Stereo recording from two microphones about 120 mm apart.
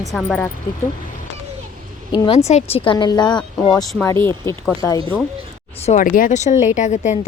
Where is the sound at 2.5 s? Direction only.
65° left (ahead or behind); by 3.4 s 35° left (ahead or behind).